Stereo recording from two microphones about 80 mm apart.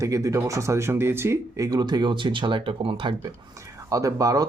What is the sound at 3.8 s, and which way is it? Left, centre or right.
Speech, right.